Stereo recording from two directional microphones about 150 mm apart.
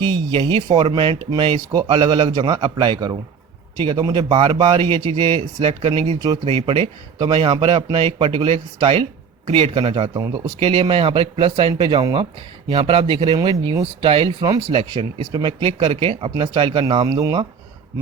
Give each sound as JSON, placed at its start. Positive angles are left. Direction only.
{"t": 0.0, "sound": "speech", "side_deg": -35}